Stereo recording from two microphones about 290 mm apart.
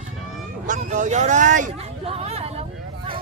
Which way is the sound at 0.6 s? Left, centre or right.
Right.